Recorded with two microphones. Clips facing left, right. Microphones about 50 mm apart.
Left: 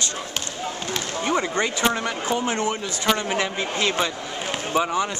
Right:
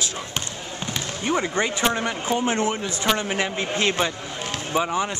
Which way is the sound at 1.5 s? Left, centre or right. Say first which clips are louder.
Even; centre.